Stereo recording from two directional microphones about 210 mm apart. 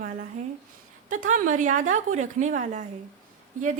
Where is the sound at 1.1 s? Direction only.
35° right (ahead or behind).